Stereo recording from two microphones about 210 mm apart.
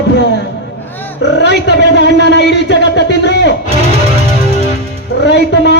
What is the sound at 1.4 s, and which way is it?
A man's voice, 55° left (ahead or behind).